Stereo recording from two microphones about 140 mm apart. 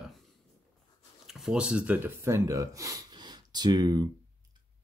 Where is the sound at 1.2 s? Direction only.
5° right (ahead or behind).